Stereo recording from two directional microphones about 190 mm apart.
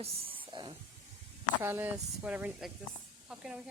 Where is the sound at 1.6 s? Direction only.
10° right (ahead or behind).